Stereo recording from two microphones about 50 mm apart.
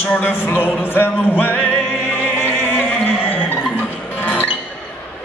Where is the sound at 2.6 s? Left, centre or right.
Left.